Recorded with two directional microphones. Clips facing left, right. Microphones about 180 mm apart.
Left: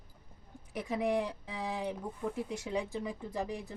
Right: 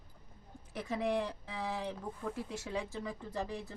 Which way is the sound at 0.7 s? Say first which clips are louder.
Left 2 dB; 15° left (ahead or behind).